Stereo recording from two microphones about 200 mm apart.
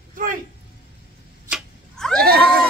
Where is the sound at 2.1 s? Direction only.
50° right (ahead or behind).